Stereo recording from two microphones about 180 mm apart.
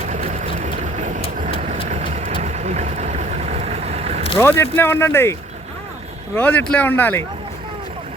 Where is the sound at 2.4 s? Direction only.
40° right (ahead or behind).